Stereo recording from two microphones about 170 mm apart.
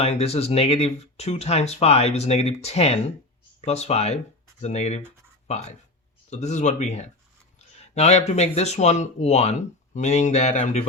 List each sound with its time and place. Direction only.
0.0 s speech: 40° left (ahead or behind)
7.8 s a sound: 40° left (ahead or behind)
8.3 s speech: 40° left (ahead or behind)